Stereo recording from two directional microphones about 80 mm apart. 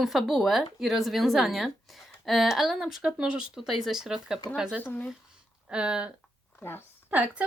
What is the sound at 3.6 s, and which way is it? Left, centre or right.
A woman's voice, centre.